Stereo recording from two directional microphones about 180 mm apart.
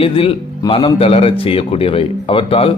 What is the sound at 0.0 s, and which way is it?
Speech, 30° left (ahead or behind).